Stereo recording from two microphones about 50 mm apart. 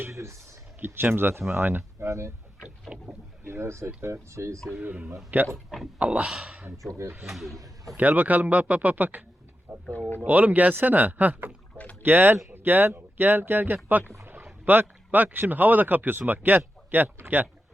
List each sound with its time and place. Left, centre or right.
0.1 s a sound: right
1.0 s speech: right
2.0 s speech: right
2.9 s boat: centre
3.4 s speech: right
4.8 s speech: right
6.1 s speech: right
7.3 s speech: centre
7.9 s speech: right
9.7 s a sound: right
10.2 s a man's voice: right